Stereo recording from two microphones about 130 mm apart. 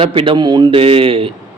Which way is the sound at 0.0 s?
45° right (ahead or behind).